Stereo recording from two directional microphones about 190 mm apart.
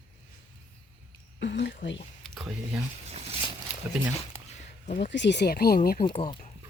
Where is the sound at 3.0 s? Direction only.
35° right (ahead or behind).